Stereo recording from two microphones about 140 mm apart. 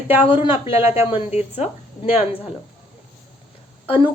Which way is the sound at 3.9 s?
40° left (ahead or behind).